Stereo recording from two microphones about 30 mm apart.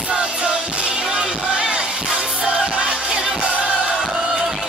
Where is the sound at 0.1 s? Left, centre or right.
Right.